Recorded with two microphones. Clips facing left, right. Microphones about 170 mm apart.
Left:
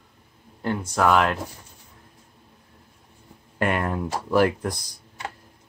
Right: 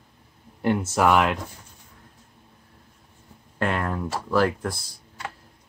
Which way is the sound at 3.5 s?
15° left (ahead or behind).